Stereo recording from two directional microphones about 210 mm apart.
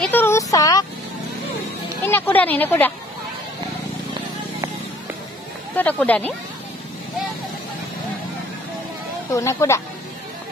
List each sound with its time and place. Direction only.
0.0 s vehicle: 10° left (ahead or behind)
2.0 s a woman's voice: 10° left (ahead or behind)
5.8 s a woman's voice: 5° left (ahead or behind)
9.3 s a woman's voice: 15° left (ahead or behind)